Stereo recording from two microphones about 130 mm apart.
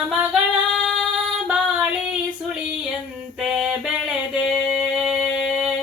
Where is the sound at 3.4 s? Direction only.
5° right (ahead or behind).